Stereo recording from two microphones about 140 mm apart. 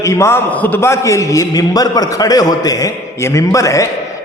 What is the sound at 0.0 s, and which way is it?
A man's voice, 20° left (ahead or behind).